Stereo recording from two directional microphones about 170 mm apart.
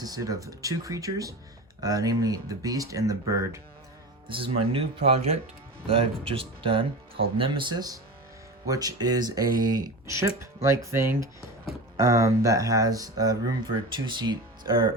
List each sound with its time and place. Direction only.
0.0 s speech: 20° right (ahead or behind)
4.3 s speech: 30° right (ahead or behind)